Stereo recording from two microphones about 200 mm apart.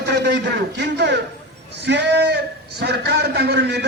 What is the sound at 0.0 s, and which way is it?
A man's voice, 55° right (ahead or behind).